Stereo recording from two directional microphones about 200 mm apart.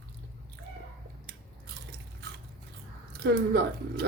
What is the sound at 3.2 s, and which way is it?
Speech, 55° right (ahead or behind).